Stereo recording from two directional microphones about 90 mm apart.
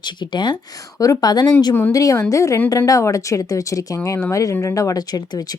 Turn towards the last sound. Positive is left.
turn(degrees=45)  # may be behind; listen again after turning